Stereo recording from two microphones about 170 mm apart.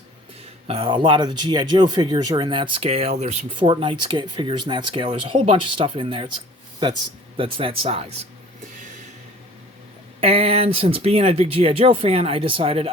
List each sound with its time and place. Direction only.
0.7 s speech: 30° right (ahead or behind)
3.6 s speech: 30° right (ahead or behind)
10.2 s speech: 35° right (ahead or behind)